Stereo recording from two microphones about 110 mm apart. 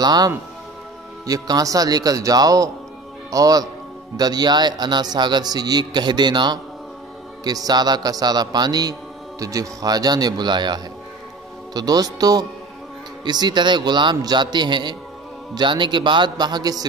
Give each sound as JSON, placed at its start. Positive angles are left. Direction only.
{"t": 0.0, "sound": "a man's voice", "side_deg": -40}